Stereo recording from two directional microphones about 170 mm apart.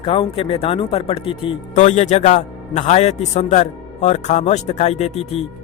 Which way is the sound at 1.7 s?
45° left (ahead or behind).